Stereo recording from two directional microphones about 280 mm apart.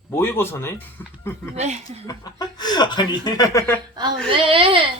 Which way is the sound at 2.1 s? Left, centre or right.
Centre.